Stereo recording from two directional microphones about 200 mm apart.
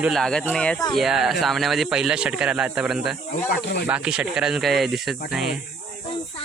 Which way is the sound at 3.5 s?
55° left (ahead or behind).